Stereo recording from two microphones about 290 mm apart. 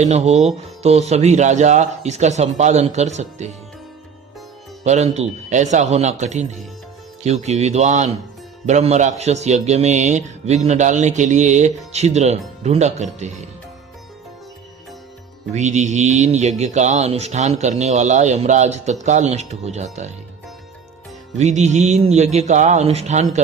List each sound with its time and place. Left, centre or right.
0.0 s a man's voice: right
4.8 s a man's voice: right
15.5 s a man's voice: right
21.3 s a man's voice: right